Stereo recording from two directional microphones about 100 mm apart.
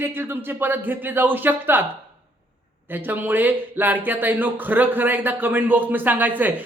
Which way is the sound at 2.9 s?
20° right (ahead or behind).